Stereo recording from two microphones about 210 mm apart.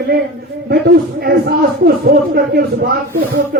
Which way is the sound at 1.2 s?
50° right (ahead or behind).